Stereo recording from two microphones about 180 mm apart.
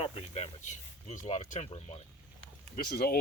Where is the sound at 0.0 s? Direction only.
35° left (ahead or behind).